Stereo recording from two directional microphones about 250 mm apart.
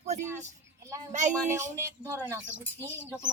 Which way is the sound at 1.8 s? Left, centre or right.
Centre.